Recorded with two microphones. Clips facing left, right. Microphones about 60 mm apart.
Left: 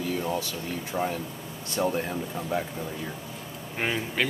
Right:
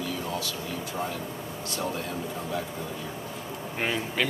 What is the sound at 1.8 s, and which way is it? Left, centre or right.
Speech, left.